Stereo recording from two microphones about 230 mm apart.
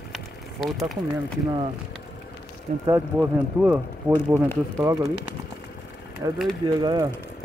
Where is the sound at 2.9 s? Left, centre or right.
Centre.